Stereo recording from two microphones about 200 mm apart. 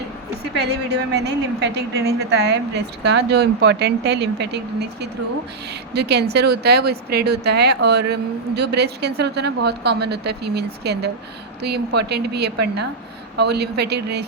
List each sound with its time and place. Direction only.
0.6 s speech: 55° right (ahead or behind)